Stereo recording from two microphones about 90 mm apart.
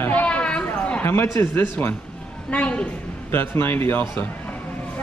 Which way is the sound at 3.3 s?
25° left (ahead or behind).